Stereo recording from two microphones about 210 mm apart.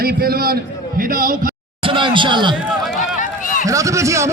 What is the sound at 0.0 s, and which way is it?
A man's voice, 45° right (ahead or behind).